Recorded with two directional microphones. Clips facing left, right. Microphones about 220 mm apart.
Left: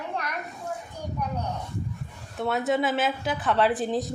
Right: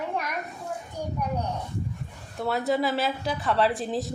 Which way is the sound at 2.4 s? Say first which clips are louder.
Even; centre (ahead or behind).